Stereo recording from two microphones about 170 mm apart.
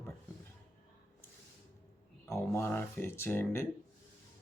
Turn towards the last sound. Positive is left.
turn(degrees=15)  # may be behind; listen again after turning